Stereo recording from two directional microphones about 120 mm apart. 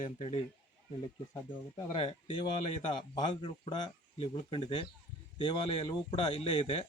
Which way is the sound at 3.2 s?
45° left (ahead or behind).